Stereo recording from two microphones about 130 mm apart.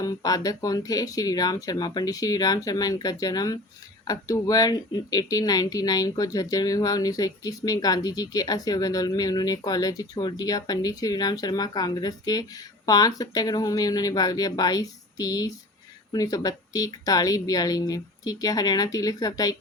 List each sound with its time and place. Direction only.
0.0 s speech: 30° left (ahead or behind)